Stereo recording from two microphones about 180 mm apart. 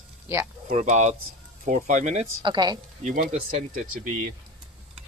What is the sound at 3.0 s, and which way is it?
Speech, 40° right (ahead or behind).